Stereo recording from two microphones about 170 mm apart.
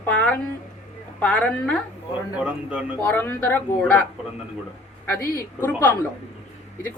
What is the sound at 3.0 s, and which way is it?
A woman's voice, 10° left (ahead or behind).